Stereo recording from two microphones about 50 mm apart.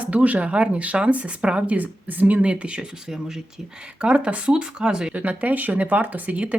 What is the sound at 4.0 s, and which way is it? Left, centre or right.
Speech, right.